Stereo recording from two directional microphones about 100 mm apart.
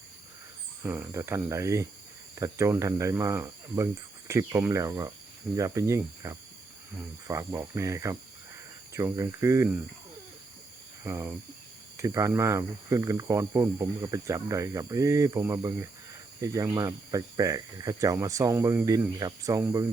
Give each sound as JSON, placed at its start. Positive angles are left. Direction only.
{"t": 0.8, "sound": "speech", "side_deg": -20}
{"t": 11.0, "sound": "speech", "side_deg": -25}